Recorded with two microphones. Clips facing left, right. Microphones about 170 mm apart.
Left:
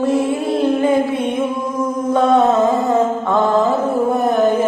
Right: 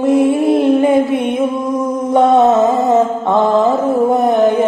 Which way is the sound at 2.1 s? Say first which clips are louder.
Right 3 dB; 20° right (ahead or behind).